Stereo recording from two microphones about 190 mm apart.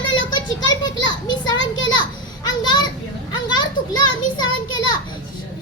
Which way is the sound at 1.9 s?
25° left (ahead or behind).